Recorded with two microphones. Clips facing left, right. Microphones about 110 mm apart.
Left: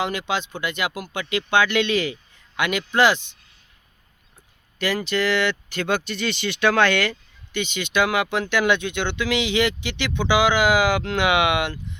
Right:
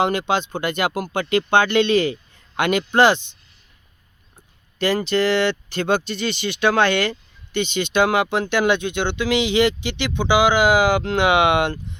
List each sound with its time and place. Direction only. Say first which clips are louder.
0.0 s speech: right 5 dB; 40° right (ahead or behind)
4.8 s speech: right 4 dB; 30° right (ahead or behind)